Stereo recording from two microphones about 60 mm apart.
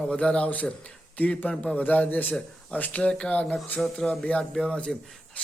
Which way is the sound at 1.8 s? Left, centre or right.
Left.